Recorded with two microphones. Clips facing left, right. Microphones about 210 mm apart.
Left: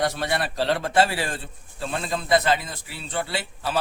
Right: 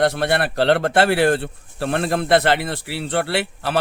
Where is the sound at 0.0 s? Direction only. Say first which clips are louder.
Right 6 dB; 65° right (ahead or behind).